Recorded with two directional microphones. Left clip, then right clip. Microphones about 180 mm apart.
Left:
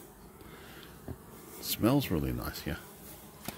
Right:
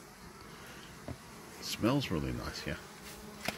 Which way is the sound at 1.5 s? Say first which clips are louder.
Left 3 dB; 20° left (ahead or behind).